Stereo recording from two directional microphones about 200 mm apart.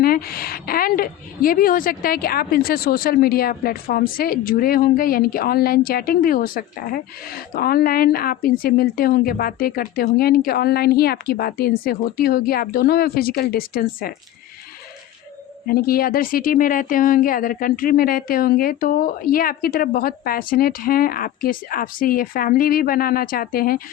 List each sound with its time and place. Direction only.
0.0 s a woman's voice: 50° left (ahead or behind)
15.6 s a woman's voice: 45° left (ahead or behind)